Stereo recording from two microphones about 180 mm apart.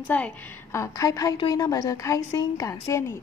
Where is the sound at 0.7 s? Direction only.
20° left (ahead or behind).